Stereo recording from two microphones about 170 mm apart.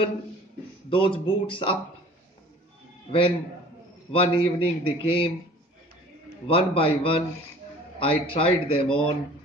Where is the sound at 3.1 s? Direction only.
30° left (ahead or behind).